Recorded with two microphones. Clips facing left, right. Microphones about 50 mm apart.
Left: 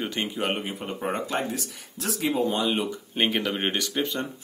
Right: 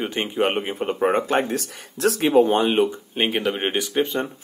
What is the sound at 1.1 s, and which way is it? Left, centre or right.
Speech, right.